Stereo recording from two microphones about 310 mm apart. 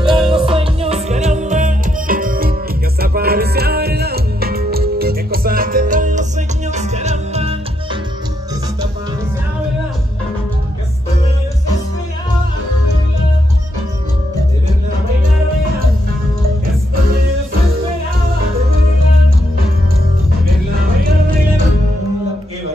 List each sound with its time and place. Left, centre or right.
0.1 s music: centre
0.4 s music: centre